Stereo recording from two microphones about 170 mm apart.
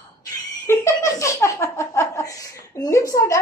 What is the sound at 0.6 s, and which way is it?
Laughter, 20° left (ahead or behind).